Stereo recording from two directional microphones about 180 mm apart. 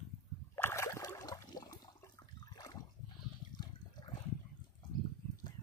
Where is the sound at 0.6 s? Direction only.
15° left (ahead or behind).